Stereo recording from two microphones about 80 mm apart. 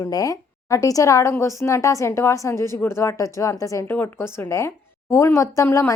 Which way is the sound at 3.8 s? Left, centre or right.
Left.